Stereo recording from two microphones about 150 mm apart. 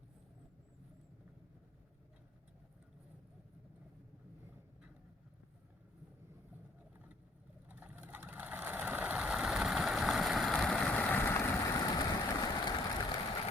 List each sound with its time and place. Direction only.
7.7 s vehicle: 10° right (ahead or behind); by 13.1 s 30° left (ahead or behind)